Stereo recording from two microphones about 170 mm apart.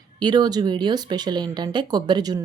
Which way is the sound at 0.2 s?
25° right (ahead or behind).